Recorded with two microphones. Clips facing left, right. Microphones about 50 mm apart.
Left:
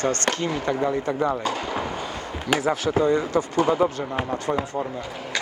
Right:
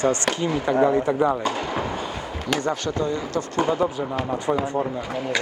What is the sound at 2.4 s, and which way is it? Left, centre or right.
Speech, centre.